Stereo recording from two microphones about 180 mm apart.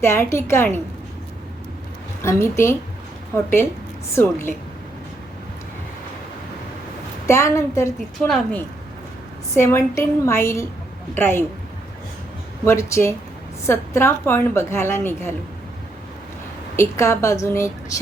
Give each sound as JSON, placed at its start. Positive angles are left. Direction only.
{"t": 0.0, "sound": "a woman's voice", "side_deg": 15}
{"t": 2.2, "sound": "a woman's voice", "side_deg": 15}
{"t": 7.3, "sound": "a woman's voice", "side_deg": 15}
{"t": 9.6, "sound": "a woman's voice", "side_deg": 15}
{"t": 12.6, "sound": "a woman's voice", "side_deg": 15}
{"t": 16.7, "sound": "a woman's voice", "side_deg": 15}